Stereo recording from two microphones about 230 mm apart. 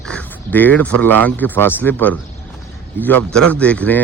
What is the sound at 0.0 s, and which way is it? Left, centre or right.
Speech, centre.